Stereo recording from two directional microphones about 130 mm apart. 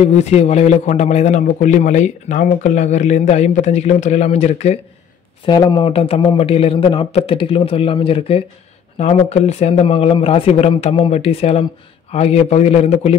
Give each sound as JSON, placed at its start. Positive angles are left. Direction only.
{"t": 0.0, "sound": "a man's voice", "side_deg": 60}
{"t": 5.5, "sound": "speech", "side_deg": 30}
{"t": 5.9, "sound": "a man's voice", "side_deg": 45}